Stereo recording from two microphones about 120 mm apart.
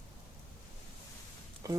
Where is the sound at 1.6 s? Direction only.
30° right (ahead or behind).